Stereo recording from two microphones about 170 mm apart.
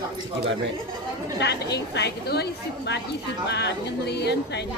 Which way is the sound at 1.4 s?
80° left.